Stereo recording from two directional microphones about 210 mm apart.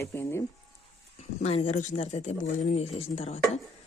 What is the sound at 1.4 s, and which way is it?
A woman's voice, 30° left (ahead or behind).